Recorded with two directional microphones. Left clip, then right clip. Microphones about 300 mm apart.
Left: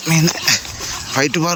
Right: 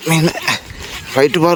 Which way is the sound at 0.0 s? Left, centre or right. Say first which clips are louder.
Right 2 dB; centre.